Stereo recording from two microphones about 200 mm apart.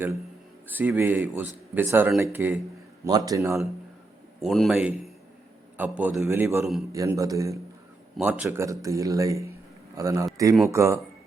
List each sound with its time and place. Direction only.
0.7 s speech: 10° right (ahead or behind)
4.4 s a man's voice: centre (ahead or behind)